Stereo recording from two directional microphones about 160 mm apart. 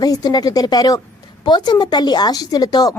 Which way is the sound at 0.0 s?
25° left (ahead or behind).